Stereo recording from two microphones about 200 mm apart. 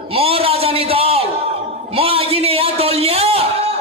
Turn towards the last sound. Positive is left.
turn(degrees=-30)  # may be behind; listen again after turning